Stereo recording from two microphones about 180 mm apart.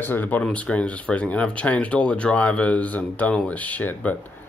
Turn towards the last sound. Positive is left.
turn(degrees=10)  # may be behind; listen again after turning